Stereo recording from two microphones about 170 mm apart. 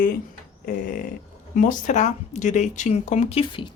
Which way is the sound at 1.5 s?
50° left (ahead or behind).